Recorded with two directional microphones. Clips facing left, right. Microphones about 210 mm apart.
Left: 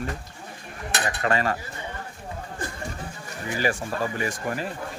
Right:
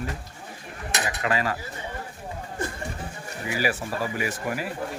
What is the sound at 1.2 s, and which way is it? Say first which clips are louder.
Speech: left 2 dB; 40° left (ahead or behind).